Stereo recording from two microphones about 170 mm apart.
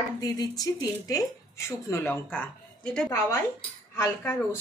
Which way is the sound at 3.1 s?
15° left (ahead or behind).